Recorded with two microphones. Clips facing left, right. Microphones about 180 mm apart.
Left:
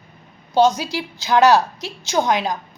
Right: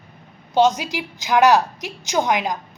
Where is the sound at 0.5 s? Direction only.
20° right (ahead or behind).